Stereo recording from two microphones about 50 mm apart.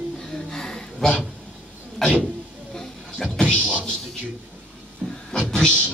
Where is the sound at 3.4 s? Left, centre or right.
Left.